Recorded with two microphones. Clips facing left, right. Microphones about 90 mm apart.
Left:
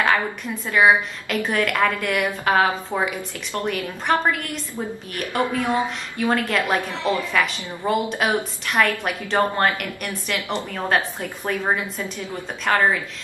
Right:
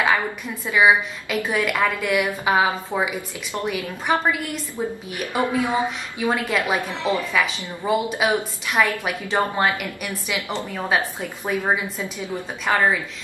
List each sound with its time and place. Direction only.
0.7 s a woman's voice: 5° right (ahead or behind)
7.3 s a woman's voice: 5° right (ahead or behind)
12.0 s a woman's voice: 15° right (ahead or behind)